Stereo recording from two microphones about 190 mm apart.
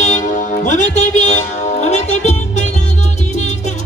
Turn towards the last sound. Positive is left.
turn(degrees=35)  # may be behind; listen again after turning